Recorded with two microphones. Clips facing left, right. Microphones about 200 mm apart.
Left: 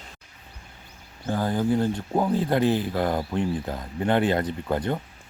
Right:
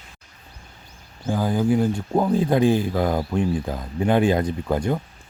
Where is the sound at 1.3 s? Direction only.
10° right (ahead or behind).